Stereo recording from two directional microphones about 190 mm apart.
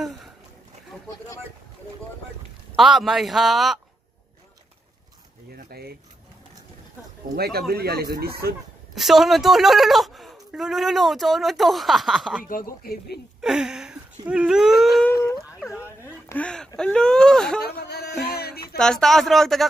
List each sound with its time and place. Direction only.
2.7 s speech: centre (ahead or behind)
5.5 s a sound: 55° right (ahead or behind)
7.3 s speech: 55° right (ahead or behind)
8.9 s speech: centre (ahead or behind)
12.4 s speech: 50° left (ahead or behind)
13.4 s speech: 5° right (ahead or behind)
15.0 s dog: 5° left (ahead or behind)
16.3 s speech: 5° left (ahead or behind)
17.7 s music: 60° left (ahead or behind)
18.8 s speech: 5° left (ahead or behind)